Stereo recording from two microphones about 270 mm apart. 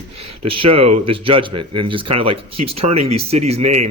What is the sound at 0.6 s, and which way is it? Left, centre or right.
Speech, right.